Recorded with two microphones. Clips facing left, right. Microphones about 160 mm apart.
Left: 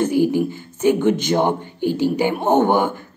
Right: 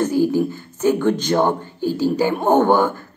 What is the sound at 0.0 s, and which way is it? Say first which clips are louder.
Speech: even; 15° left (ahead or behind).